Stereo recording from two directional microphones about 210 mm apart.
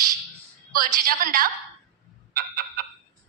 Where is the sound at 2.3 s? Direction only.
45° right (ahead or behind).